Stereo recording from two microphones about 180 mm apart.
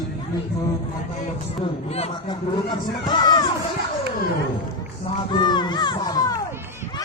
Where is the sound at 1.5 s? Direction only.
35° left (ahead or behind).